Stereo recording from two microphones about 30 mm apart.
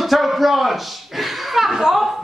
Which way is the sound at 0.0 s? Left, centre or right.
Centre.